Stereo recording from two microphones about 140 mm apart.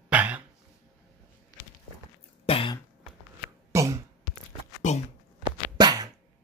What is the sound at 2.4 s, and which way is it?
Cough, 40° left (ahead or behind).